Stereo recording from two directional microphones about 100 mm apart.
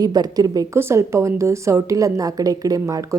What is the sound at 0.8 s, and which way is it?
A woman's voice, 25° right (ahead or behind).